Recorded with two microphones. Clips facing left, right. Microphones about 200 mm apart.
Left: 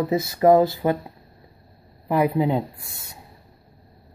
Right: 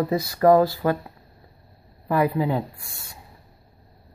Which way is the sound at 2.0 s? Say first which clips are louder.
Left 1 dB; 20° left (ahead or behind).